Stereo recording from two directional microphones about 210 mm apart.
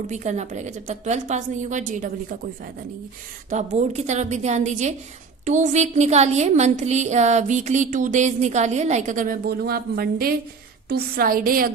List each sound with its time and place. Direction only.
0.1 s a woman's voice: 35° right (ahead or behind)